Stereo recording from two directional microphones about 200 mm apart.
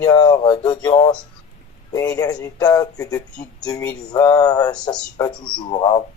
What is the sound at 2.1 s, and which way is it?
Speech, 15° left (ahead or behind).